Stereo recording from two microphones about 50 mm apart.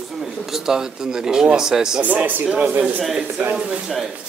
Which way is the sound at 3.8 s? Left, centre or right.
Centre.